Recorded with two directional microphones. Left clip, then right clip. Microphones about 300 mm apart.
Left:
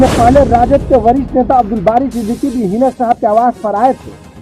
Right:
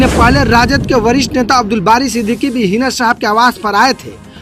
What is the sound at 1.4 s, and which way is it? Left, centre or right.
Speech, right.